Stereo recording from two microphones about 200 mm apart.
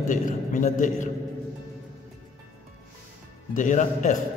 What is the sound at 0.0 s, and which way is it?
A man's voice, 40° left (ahead or behind).